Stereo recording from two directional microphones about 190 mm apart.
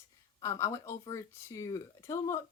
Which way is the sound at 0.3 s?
15° left (ahead or behind).